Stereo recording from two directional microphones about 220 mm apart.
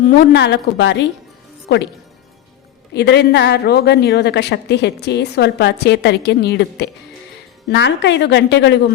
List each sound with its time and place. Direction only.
0.2 s a woman's voice: 50° left (ahead or behind)
2.9 s a woman's voice: 50° left (ahead or behind)